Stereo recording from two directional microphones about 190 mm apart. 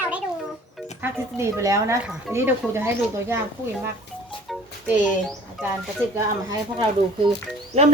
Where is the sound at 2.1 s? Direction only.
10° right (ahead or behind).